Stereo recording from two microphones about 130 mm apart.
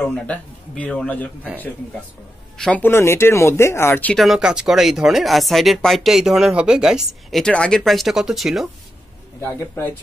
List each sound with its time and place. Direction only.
0.1 s a man's voice: 10° left (ahead or behind)
2.5 s speech: 5° left (ahead or behind)
2.8 s speech: 20° left (ahead or behind)
4.2 s speech: 5° right (ahead or behind)
9.4 s speech: 20° left (ahead or behind)